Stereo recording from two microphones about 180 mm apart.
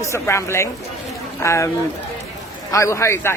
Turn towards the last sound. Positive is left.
turn(degrees=15)  # may be behind; listen again after turning